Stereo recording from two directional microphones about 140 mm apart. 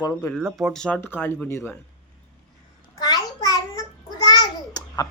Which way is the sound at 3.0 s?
25° left (ahead or behind).